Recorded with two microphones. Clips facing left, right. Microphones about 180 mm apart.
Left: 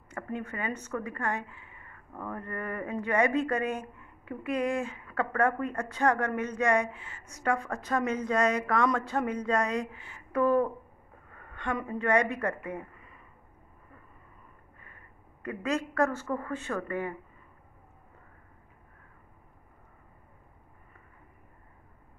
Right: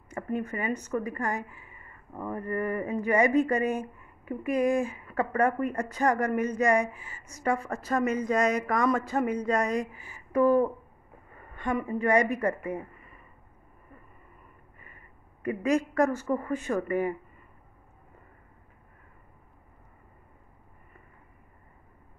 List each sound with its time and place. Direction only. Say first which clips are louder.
0.1 s a woman's voice: right 5 dB; 10° right (ahead or behind)
15.4 s a woman's voice: right 5 dB; 10° right (ahead or behind)